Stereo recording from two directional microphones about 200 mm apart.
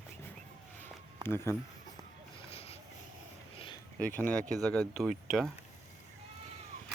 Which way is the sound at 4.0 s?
10° left (ahead or behind).